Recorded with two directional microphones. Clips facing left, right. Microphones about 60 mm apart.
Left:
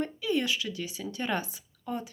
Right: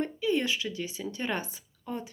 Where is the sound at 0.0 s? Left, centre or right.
Right.